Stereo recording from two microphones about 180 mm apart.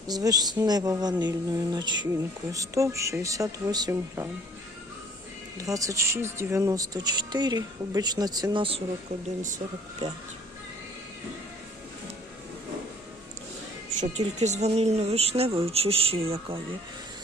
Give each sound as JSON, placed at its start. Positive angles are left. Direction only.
{"t": 0.1, "sound": "speech", "side_deg": -20}
{"t": 5.5, "sound": "speech", "side_deg": -20}
{"t": 14.0, "sound": "a woman's voice", "side_deg": -40}